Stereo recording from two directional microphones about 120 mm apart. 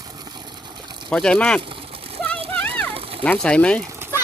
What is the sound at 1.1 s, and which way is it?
Speech, 10° left (ahead or behind).